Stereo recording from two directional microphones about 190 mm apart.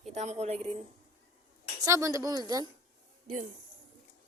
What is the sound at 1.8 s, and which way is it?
Speech, 15° right (ahead or behind).